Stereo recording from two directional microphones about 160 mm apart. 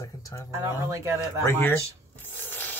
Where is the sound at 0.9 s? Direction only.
20° right (ahead or behind).